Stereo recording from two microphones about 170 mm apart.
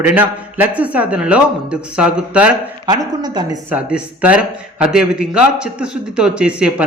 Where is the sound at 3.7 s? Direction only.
10° right (ahead or behind).